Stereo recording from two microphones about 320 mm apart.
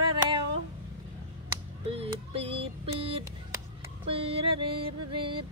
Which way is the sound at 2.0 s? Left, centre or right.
Centre.